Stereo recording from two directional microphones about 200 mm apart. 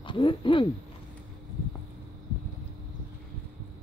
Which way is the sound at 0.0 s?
25° left (ahead or behind).